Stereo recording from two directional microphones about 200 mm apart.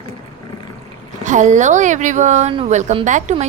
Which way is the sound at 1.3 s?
40° right (ahead or behind).